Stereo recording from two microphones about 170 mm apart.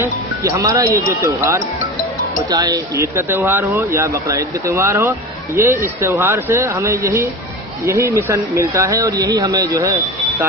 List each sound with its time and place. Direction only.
0.0 s speech: 20° right (ahead or behind)